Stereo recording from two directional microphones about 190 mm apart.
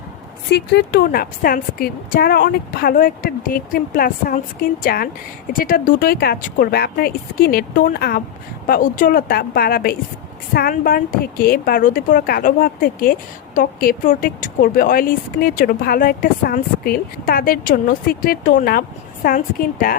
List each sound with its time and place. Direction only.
0.5 s a woman's voice: 60° left (ahead or behind)